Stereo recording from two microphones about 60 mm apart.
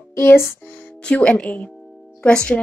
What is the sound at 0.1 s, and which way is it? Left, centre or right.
Music, left.